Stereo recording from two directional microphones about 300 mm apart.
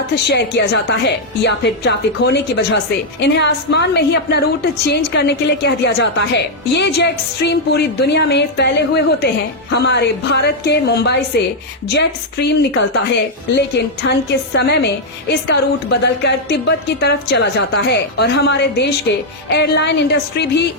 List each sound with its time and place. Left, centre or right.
0.3 s a woman's voice: left
14.1 s a woman's voice: left